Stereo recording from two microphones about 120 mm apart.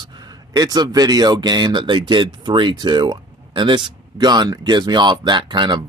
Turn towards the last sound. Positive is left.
turn(degrees=-40)  # may be behind; listen again after turning